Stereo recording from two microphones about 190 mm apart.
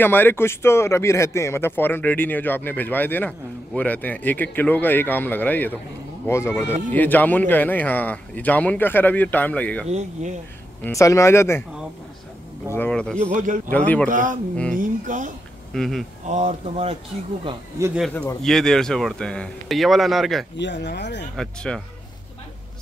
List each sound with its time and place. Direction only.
0.0 s speech: 10° left (ahead or behind)
9.8 s speech: 35° right (ahead or behind)
10.8 s speech: 15° left (ahead or behind)
12.7 s speech: 5° left (ahead or behind)
13.3 s speech: 45° right (ahead or behind)
13.7 s speech: 10° left (ahead or behind)
14.0 s speech: 45° right (ahead or behind)
15.7 s speech: centre (ahead or behind)
16.3 s speech: 40° right (ahead or behind)
18.4 s speech: centre (ahead or behind)
20.5 s speech: 65° left (ahead or behind)
21.4 s speech: 5° left (ahead or behind)